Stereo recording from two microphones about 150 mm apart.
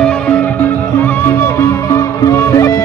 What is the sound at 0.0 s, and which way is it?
Music, 10° left (ahead or behind).